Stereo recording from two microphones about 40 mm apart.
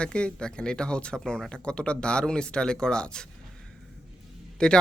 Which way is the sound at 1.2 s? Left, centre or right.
Centre.